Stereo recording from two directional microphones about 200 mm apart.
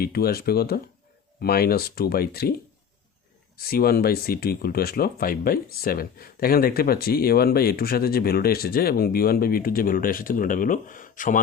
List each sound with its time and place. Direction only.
0.0 s speech: 50° left (ahead or behind)
3.6 s speech: 50° left (ahead or behind)